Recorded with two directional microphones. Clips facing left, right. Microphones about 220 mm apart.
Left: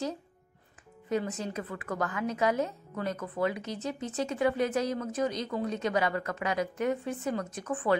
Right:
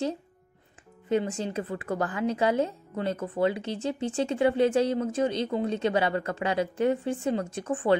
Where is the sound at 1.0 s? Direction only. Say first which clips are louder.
Right 4 dB; 25° right (ahead or behind).